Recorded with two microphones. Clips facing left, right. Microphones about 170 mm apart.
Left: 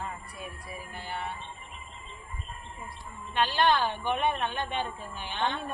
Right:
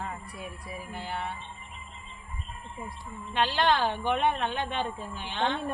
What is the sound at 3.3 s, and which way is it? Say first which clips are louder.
A woman's voice: even; 85° right.